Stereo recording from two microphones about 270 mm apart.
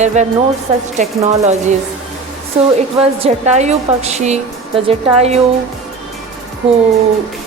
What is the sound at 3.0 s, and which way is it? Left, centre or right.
A woman's voice, right.